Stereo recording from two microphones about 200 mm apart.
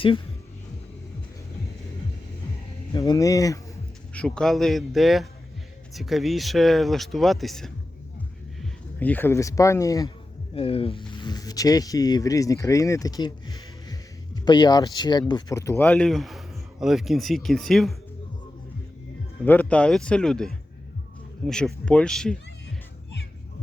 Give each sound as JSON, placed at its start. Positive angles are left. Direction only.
{"t": 2.9, "sound": "speech", "side_deg": 20}
{"t": 4.1, "sound": "speech", "side_deg": 5}
{"t": 9.0, "sound": "speech", "side_deg": 10}
{"t": 10.5, "sound": "speech", "side_deg": 30}
{"t": 19.5, "sound": "speech", "side_deg": 5}